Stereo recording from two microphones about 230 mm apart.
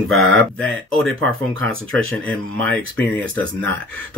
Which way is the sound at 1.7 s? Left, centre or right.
Right.